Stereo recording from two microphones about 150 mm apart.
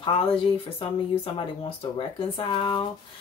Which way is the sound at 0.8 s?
35° left (ahead or behind).